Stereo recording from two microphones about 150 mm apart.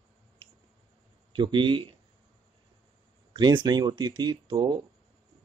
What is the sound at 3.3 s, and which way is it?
Speech, 30° right (ahead or behind).